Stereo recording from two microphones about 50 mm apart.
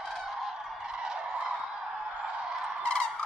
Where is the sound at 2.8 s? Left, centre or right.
Centre.